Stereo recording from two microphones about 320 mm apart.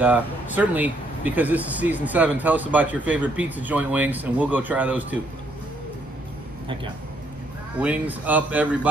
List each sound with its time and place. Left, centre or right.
0.0 s speech: centre
7.8 s speech: centre